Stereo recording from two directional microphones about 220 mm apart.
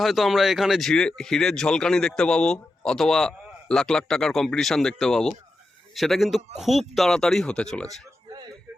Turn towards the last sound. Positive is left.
turn(degrees=0)  # may be behind; listen again after turning